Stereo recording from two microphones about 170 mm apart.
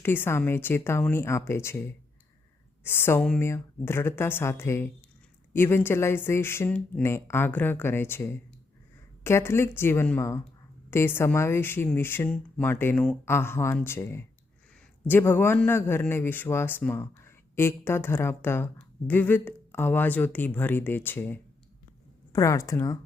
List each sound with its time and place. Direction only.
0.0 s a man's voice: 15° left (ahead or behind)